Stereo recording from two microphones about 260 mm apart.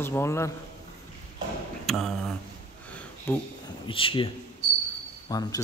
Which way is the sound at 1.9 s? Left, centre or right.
Centre.